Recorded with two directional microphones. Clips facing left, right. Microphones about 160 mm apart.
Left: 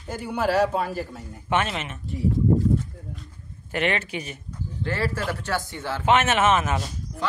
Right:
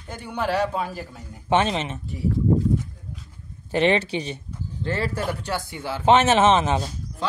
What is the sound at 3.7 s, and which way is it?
Speech, 30° right (ahead or behind).